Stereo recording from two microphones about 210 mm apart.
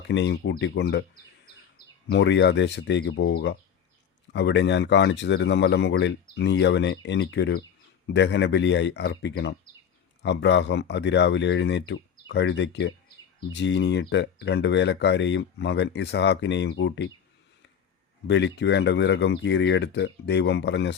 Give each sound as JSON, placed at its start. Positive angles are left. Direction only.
{"t": 0.1, "sound": "speech", "side_deg": 55}
{"t": 18.3, "sound": "speech", "side_deg": 55}